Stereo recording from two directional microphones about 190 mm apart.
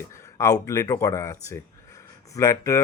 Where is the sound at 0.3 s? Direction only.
15° left (ahead or behind).